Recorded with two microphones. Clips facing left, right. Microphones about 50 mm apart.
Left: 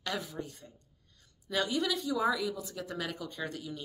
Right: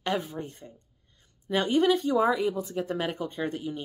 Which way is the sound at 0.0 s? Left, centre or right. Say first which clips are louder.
Right 7 dB; right.